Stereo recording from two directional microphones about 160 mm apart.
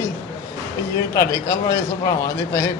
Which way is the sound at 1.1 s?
20° left (ahead or behind).